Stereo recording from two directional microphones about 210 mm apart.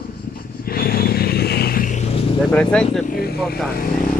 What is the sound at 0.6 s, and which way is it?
Vehicle, 45° left (ahead or behind).